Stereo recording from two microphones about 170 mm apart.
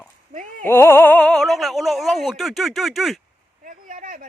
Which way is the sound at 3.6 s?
55° right (ahead or behind).